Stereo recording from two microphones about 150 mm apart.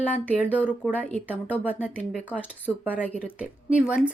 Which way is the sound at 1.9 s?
10° left (ahead or behind).